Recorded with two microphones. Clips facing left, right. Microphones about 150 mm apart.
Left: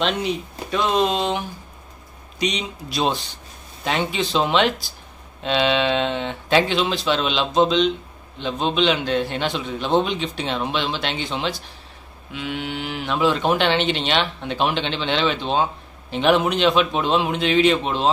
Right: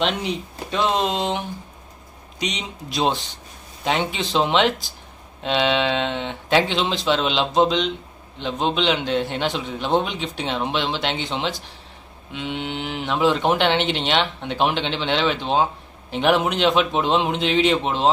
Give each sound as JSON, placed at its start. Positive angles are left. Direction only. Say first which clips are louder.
{"t": 0.0, "sound": "a man's voice", "louder": "left 1 dB", "side_deg": -20}
{"t": 2.4, "sound": "a man's voice", "louder": "left 4 dB", "side_deg": -20}